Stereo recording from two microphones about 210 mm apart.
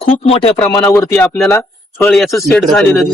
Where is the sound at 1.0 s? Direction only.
5° left (ahead or behind).